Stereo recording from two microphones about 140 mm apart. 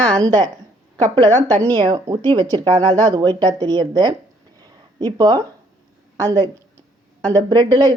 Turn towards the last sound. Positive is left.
turn(degrees=-35)  # may be behind; listen again after turning